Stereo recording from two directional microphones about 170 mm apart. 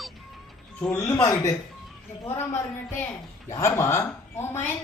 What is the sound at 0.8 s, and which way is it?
A woman's voice, 10° left (ahead or behind).